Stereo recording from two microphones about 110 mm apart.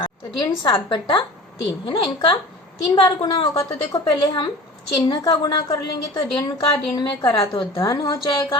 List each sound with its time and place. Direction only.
0.0 s a woman's voice: 45° left (ahead or behind)